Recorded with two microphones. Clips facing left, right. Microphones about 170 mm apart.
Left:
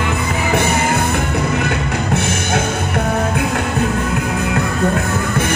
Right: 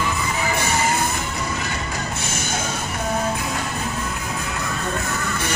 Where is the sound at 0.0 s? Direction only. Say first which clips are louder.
Left 4 dB; 60° left (ahead or behind).